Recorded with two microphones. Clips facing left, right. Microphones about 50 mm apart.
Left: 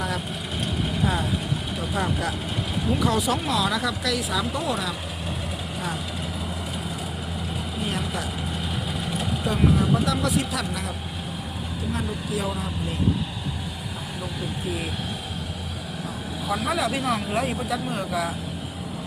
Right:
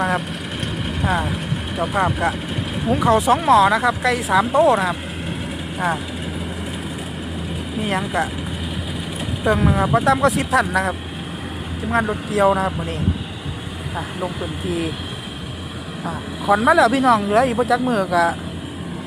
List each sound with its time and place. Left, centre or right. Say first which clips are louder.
1.0 s speech: right 6 dB; right
7.8 s speech: right 9 dB; right
9.5 s speech: right 5 dB; right
12.3 s speech: right 14 dB; right
16.6 s speech: right 11 dB; right